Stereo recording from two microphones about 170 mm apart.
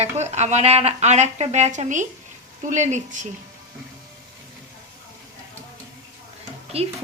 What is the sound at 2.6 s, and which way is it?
Frying, 45° right (ahead or behind).